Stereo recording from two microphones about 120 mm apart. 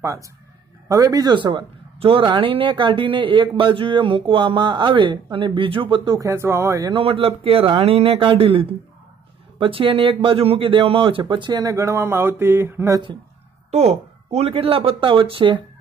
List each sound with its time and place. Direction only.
0.0 s speech: 25° right (ahead or behind); by 6.1 s 45° right (ahead or behind)
6.1 s speech: 25° right (ahead or behind)
6.9 s speech: 50° right (ahead or behind); by 13.0 s 20° right (ahead or behind)
13.7 s speech: 60° right (ahead or behind); by 15.6 s 45° right (ahead or behind)